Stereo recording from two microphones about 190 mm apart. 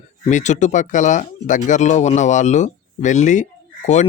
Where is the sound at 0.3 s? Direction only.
40° left (ahead or behind).